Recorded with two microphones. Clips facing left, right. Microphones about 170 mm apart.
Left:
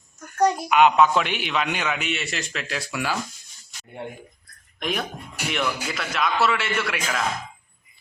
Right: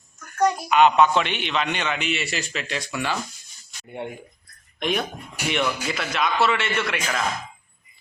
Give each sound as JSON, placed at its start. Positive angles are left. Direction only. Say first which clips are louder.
{"t": 0.3, "sound": "a sound", "louder": "left 1 dB", "side_deg": 30}
{"t": 0.7, "sound": "a man's voice", "louder": "right 1 dB", "side_deg": 10}
{"t": 4.8, "sound": "a man's voice", "louder": "right 3 dB", "side_deg": 0}